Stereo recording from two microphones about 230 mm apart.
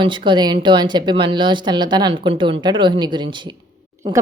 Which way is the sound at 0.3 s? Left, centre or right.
Centre.